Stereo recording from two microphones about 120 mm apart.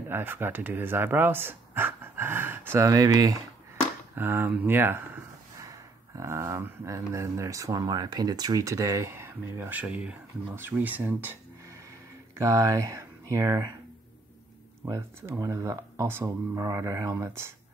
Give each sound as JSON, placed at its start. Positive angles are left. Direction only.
{"t": 0.1, "sound": "speech", "side_deg": -15}
{"t": 4.1, "sound": "speech", "side_deg": -15}
{"t": 5.6, "sound": "speech", "side_deg": -30}
{"t": 12.4, "sound": "speech", "side_deg": -25}
{"t": 14.9, "sound": "speech", "side_deg": -25}